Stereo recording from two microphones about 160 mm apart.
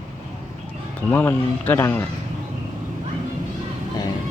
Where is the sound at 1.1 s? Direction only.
10° left (ahead or behind).